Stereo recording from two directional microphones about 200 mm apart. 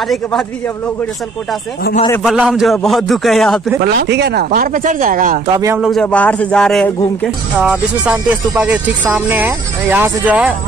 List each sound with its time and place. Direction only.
2.2 s a man's voice: 5° right (ahead or behind)
3.8 s speech: 55° right (ahead or behind)
5.5 s speech: 15° right (ahead or behind)
5.8 s a man's voice: centre (ahead or behind)